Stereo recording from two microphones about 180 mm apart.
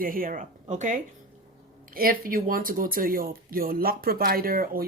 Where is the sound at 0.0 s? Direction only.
50° right (ahead or behind).